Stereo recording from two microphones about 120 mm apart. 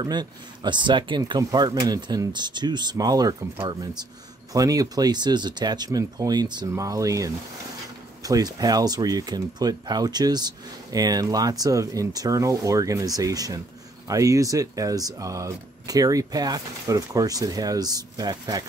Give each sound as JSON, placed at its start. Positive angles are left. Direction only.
{"t": 0.0, "sound": "speech", "side_deg": -35}